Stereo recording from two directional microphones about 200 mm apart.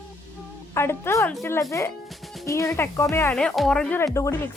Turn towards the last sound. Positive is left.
turn(degrees=10)  # may be behind; listen again after turning